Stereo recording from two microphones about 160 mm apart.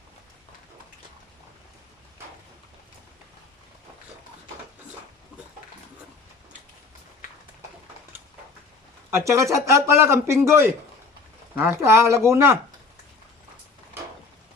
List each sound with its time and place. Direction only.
9.0 s speech: 15° right (ahead or behind)